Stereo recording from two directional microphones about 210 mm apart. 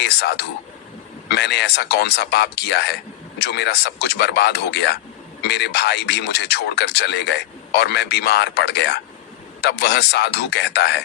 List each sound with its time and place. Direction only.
0.0 s a man's voice: 50° left (ahead or behind)